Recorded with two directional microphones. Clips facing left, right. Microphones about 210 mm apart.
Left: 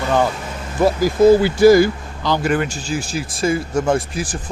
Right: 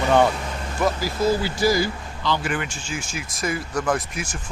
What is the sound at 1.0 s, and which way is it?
Speech, 55° left (ahead or behind).